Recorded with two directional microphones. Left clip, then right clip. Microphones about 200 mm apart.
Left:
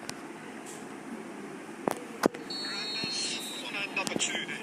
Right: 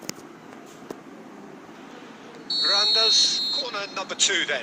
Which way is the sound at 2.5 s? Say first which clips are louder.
Right 14 dB; 45° right (ahead or behind).